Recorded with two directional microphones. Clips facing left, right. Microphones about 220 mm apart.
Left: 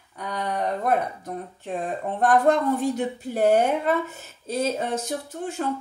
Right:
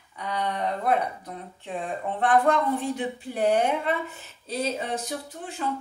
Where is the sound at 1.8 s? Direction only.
40° left (ahead or behind).